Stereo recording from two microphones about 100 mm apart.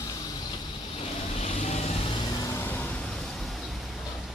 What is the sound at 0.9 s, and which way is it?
Vehicle, 90° left.